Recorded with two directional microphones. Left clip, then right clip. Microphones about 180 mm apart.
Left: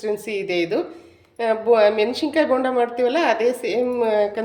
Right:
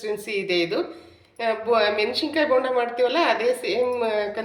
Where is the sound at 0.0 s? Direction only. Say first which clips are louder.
Left 2 dB; 65° left (ahead or behind).